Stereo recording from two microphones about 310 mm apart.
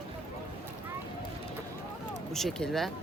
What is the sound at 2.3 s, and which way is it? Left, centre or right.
Speech, centre.